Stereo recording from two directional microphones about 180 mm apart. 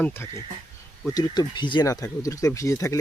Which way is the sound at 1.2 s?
25° left (ahead or behind).